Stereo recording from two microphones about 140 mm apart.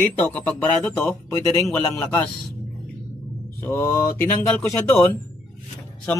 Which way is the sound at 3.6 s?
20° left (ahead or behind).